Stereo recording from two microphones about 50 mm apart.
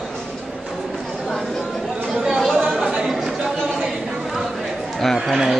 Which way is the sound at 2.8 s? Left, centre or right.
Centre.